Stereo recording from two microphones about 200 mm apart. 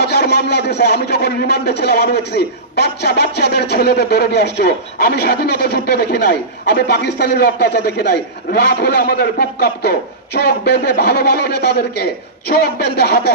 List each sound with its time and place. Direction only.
0.0 s speech: 55° left (ahead or behind)